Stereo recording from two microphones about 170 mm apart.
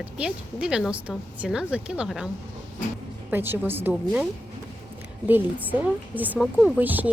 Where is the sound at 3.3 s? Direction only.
10° right (ahead or behind).